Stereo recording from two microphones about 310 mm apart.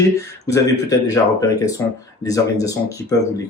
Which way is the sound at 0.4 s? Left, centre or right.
Centre.